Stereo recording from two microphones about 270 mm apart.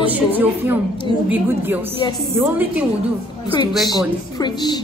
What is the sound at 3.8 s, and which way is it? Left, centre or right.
Speech, centre.